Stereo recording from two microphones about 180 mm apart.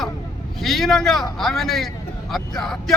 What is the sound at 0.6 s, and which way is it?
Speech, centre (ahead or behind).